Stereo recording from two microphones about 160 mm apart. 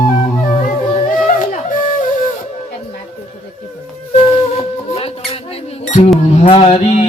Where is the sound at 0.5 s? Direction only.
50° left (ahead or behind).